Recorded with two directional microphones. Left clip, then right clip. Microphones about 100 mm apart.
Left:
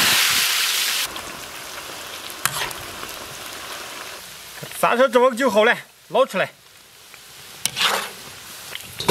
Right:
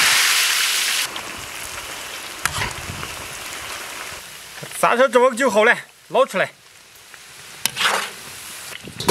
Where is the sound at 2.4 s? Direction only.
10° left (ahead or behind).